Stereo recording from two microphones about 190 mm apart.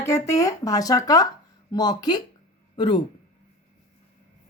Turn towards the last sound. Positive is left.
turn(degrees=25)  # may be behind; listen again after turning